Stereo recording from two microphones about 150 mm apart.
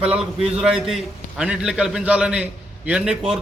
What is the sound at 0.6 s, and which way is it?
A man's voice, 5° right (ahead or behind).